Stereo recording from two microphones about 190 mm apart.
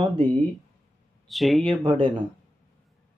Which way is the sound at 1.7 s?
25° right (ahead or behind).